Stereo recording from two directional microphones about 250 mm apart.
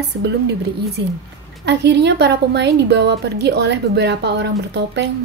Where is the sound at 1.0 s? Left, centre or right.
Right.